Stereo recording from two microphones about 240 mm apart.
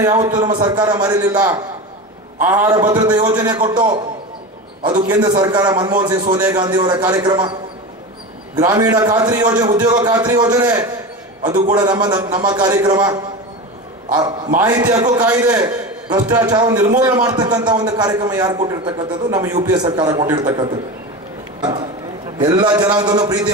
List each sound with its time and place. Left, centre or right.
0.0 s a man's voice: centre
4.8 s a man's voice: centre
8.5 s a man's voice: centre
14.7 s a man's voice: centre